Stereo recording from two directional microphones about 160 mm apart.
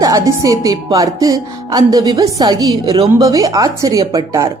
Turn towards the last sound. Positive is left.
turn(degrees=-20)  # may be behind; listen again after turning